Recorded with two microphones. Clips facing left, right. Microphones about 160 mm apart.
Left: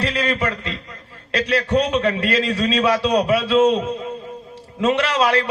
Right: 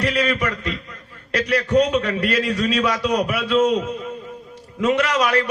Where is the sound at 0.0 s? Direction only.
30° left (ahead or behind).